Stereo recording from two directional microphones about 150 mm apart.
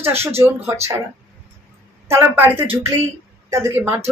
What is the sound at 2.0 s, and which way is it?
A woman's voice, 15° right (ahead or behind).